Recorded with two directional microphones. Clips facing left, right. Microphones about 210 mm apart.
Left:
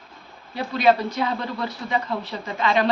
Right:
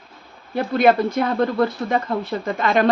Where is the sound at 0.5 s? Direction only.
55° right (ahead or behind).